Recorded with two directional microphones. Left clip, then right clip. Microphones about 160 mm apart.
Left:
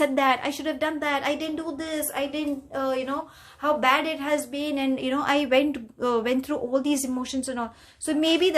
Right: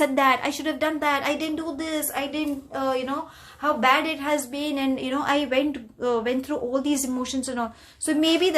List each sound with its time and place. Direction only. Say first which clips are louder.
0.0 s a woman's voice: right 2 dB; 10° left (ahead or behind); by 6.6 s 35° left (ahead or behind)
6.7 s a woman's voice: left 1 dB; 15° left (ahead or behind)